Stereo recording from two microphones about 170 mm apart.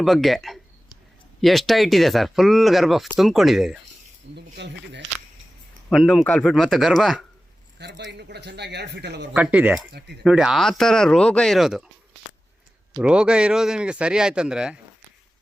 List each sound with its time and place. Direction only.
0.0 s speech: centre (ahead or behind)
4.4 s speech: 80° right
5.9 s speech: centre (ahead or behind)
7.8 s speech: 85° right
9.3 s speech: 5° right (ahead or behind)
13.0 s speech: 5° right (ahead or behind)